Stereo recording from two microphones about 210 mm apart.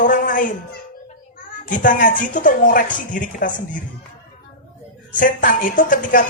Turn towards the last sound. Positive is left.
turn(degrees=40)  # may be behind; listen again after turning